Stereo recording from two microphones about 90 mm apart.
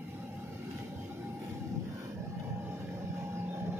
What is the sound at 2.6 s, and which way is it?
Vehicle, 30° right (ahead or behind).